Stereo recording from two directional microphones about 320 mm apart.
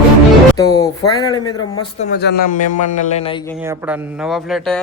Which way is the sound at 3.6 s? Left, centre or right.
Centre.